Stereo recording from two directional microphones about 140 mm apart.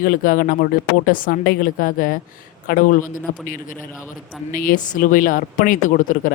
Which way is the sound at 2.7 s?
75° left (ahead or behind).